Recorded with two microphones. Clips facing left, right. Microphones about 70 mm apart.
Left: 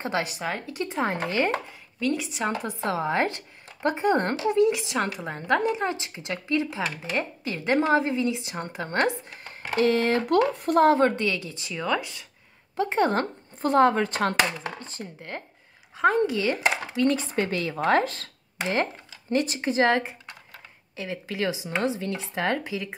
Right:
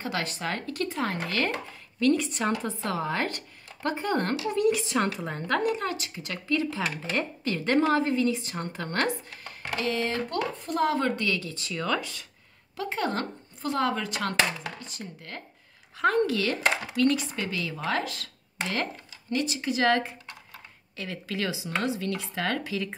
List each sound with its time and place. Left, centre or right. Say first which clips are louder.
0.0 s speech: left 3 dB; left
0.3 s a woman's voice: left 1 dB; centre
2.0 s speech: right 3 dB; centre
2.8 s speech: left 4 dB; left
4.8 s a woman's voice: even; centre
9.5 s a sound: left 8 dB; left
9.8 s speech: left 6 dB; left
11.1 s speech: left 2 dB; left
16.0 s speech: left 2 dB; centre
17.3 s speech: left 5 dB; left
18.6 s speech: left 4 dB; left
19.3 s speech: left 4 dB; left; by 22.9 s centre